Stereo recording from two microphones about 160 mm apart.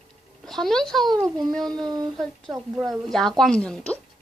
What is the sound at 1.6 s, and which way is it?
Speech, 25° right (ahead or behind).